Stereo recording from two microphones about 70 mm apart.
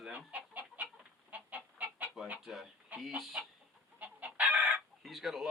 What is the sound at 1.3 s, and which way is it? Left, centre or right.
Fowl, right.